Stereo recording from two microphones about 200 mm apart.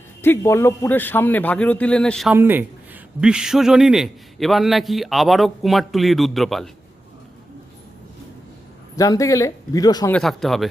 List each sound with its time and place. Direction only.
0.2 s a man's voice: 10° left (ahead or behind)
2.3 s a man's voice: 10° right (ahead or behind)
9.0 s a man's voice: 15° left (ahead or behind)
10.1 s a man's voice: centre (ahead or behind)